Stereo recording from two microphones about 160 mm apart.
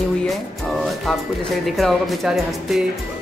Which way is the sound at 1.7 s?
Centre (ahead or behind).